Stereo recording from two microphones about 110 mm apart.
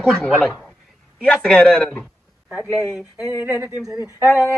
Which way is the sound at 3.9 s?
30° left (ahead or behind).